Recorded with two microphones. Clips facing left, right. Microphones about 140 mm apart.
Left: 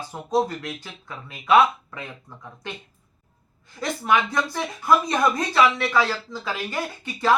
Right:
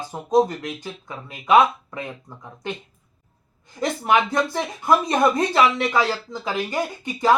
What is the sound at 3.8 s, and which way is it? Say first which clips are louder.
Speech: right 3 dB; 25° right (ahead or behind).